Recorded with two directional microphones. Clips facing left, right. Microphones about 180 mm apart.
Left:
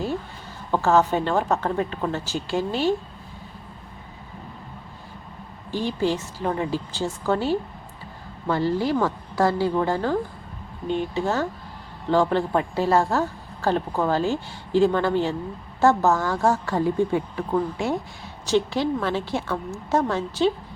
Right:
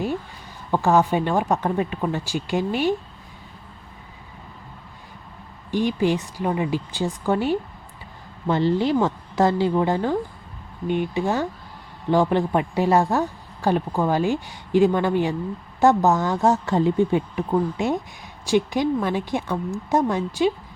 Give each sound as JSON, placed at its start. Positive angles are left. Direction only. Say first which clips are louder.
{"t": 0.7, "sound": "a woman's voice", "louder": "right 1 dB", "side_deg": -15}
{"t": 5.7, "sound": "a woman's voice", "louder": "right 3 dB", "side_deg": -15}